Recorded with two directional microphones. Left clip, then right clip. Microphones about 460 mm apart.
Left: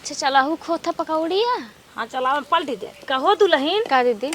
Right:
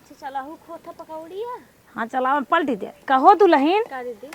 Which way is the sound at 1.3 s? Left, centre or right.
Left.